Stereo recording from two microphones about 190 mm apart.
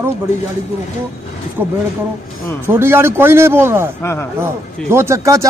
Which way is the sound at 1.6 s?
10° right (ahead or behind).